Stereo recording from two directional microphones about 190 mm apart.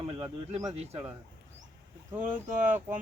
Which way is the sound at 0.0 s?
25° right (ahead or behind).